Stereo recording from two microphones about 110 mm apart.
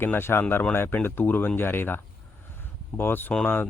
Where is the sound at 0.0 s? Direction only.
20° left (ahead or behind).